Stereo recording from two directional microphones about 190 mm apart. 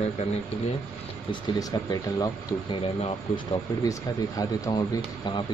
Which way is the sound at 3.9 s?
15° left (ahead or behind).